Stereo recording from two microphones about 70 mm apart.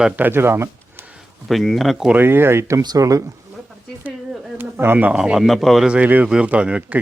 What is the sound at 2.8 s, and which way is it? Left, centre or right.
Speech, right.